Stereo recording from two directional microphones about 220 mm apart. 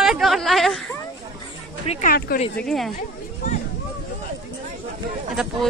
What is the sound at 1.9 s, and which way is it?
Speech, 35° left (ahead or behind).